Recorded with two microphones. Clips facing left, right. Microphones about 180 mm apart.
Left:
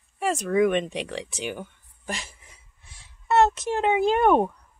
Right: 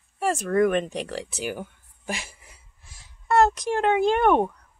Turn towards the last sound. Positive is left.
turn(degrees=5)  # may be behind; listen again after turning